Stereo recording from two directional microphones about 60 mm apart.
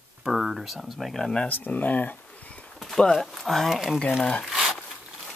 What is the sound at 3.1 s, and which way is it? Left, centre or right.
Speech, centre.